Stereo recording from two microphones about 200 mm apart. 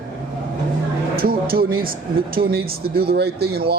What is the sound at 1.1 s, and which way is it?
Speech, 50° right (ahead or behind).